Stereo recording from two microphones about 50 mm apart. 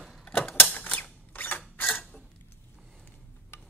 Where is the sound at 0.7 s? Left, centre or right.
Left.